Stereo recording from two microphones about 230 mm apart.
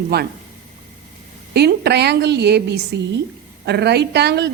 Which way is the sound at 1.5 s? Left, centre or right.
Right.